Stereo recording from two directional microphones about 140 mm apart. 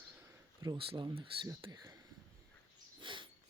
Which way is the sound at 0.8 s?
40° right (ahead or behind).